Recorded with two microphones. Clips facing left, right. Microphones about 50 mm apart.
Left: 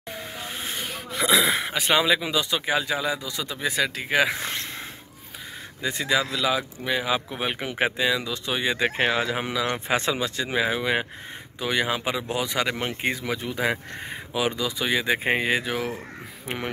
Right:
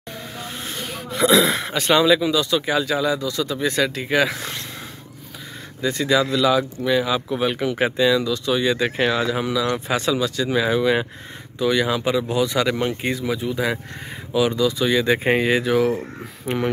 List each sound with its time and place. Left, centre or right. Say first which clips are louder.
1.1 s speech: right 5 dB; centre
3.5 s speech: right 2 dB; centre
4.3 s speech: even; left
5.8 s speech: right 5 dB; centre
13.2 s speech: right 5 dB; left
14.6 s speech: right 6 dB; left
15.1 s speech: right 5 dB; centre